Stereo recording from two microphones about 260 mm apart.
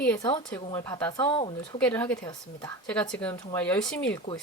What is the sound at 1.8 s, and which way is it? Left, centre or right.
Speech, centre.